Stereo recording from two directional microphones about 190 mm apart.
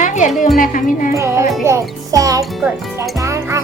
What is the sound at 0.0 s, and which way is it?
Music, 40° left (ahead or behind).